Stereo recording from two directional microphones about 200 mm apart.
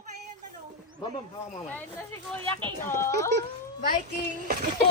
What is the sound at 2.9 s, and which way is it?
Speech, 15° left (ahead or behind).